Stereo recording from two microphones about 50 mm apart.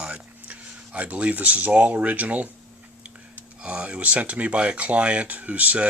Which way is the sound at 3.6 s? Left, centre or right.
Right.